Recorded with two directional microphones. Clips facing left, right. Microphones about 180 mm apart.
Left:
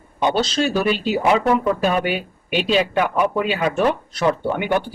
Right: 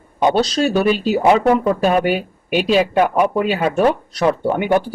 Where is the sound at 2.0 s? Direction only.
40° right (ahead or behind).